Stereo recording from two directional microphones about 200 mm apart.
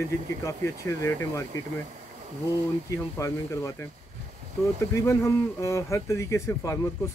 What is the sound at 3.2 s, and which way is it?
Speech, 15° left (ahead or behind).